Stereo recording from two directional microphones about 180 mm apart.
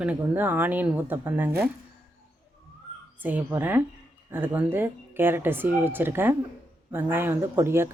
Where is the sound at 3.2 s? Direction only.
10° right (ahead or behind).